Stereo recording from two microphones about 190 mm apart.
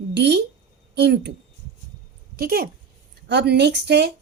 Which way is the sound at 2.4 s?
55° right (ahead or behind).